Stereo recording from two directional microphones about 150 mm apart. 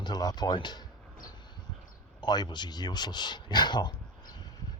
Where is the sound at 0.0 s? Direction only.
25° left (ahead or behind).